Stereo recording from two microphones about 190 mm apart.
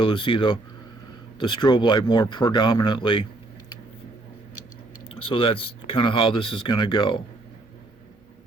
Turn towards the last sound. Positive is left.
turn(degrees=25)  # may be behind; listen again after turning